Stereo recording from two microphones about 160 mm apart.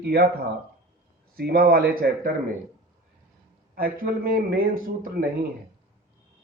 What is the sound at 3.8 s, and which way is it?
Speech, 65° right (ahead or behind).